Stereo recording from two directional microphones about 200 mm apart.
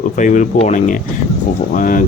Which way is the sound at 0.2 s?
40° left (ahead or behind).